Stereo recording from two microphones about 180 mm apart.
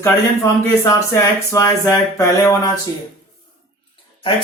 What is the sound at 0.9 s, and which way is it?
Speech, 20° left (ahead or behind).